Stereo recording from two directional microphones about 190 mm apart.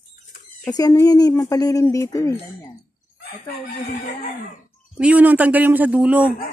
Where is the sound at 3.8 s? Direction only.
40° left (ahead or behind).